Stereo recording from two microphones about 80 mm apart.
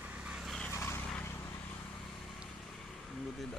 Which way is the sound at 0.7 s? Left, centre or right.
Left.